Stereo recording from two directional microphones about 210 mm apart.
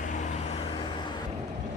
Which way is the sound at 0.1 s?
25° left (ahead or behind).